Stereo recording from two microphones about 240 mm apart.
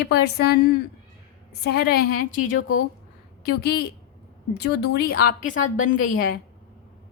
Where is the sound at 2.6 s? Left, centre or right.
Left.